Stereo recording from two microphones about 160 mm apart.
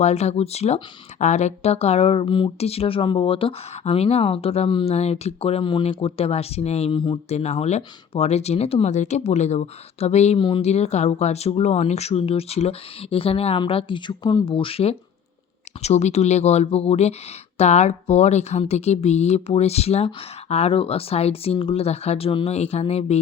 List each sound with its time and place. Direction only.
0.0 s speech: 40° left (ahead or behind)
7.3 s speech: 45° left (ahead or behind)